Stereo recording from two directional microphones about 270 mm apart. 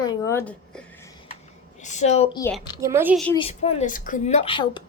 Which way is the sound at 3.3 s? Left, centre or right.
Left.